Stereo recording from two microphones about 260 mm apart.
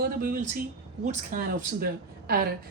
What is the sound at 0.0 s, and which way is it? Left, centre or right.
A woman's voice, right.